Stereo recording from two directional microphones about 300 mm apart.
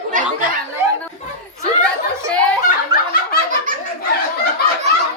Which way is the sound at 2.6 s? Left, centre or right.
Left.